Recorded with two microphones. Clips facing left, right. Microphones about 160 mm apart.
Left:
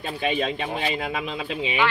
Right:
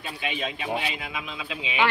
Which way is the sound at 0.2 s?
45° left (ahead or behind).